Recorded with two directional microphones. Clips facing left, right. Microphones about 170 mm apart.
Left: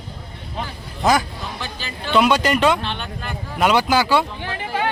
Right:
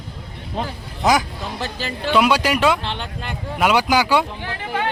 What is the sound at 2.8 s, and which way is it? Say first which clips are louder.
Speech: even; 25° right (ahead or behind).